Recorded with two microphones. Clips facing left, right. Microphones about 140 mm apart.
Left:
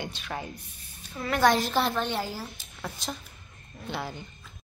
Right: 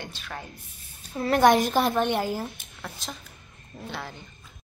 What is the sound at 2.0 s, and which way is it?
Speech, 50° right (ahead or behind).